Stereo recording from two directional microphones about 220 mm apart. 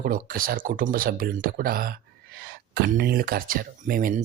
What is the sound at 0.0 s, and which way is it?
Speech, 40° right (ahead or behind).